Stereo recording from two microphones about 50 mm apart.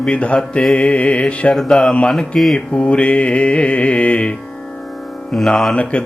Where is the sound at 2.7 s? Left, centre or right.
Left.